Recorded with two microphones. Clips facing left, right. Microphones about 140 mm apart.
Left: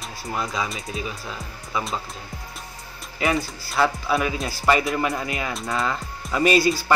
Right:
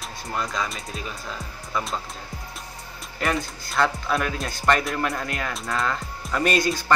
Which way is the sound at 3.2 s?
Centre (ahead or behind).